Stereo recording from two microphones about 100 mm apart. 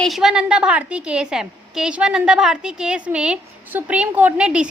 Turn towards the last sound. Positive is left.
turn(degrees=-10)  # may be behind; listen again after turning